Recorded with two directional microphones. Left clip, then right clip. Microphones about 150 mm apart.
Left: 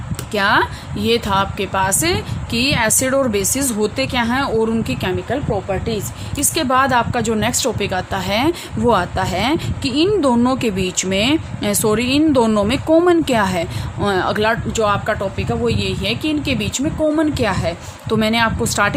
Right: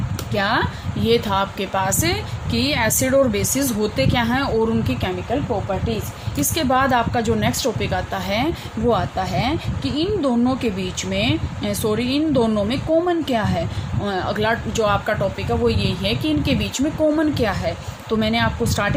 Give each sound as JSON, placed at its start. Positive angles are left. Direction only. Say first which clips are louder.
{"t": 0.3, "sound": "a woman's voice", "louder": "left 5 dB", "side_deg": 50}
{"t": 6.3, "sound": "a woman's voice", "louder": "left 3 dB", "side_deg": 45}